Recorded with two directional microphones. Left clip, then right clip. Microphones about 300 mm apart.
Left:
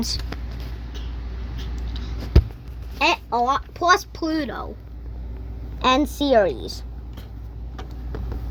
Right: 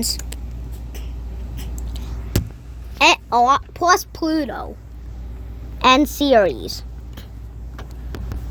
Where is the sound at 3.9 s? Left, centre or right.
Right.